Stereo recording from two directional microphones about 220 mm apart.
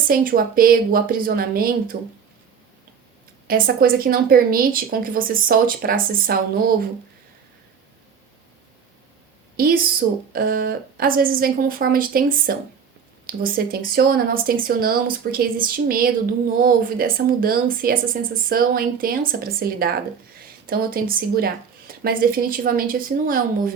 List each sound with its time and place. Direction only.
0.1 s speech: 40° right (ahead or behind)
3.4 s speech: 40° right (ahead or behind)
9.6 s speech: 40° right (ahead or behind)